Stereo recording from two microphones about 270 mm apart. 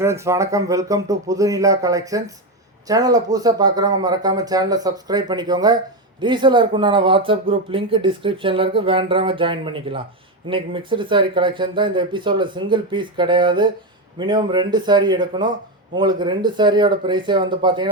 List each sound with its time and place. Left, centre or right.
0.0 s speech: centre